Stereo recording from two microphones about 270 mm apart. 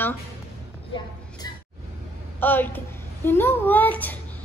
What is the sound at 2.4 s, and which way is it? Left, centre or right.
A child's voice, centre.